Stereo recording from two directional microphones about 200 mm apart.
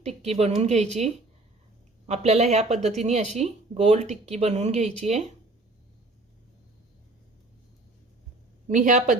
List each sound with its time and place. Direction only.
0.2 s speech: 30° right (ahead or behind)
8.6 s speech: 40° right (ahead or behind)